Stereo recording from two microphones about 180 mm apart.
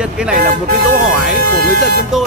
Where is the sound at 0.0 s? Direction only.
5° right (ahead or behind).